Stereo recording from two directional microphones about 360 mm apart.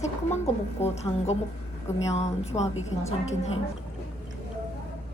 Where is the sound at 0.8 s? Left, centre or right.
Centre.